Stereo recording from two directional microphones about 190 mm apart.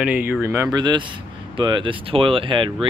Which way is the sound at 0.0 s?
10° right (ahead or behind).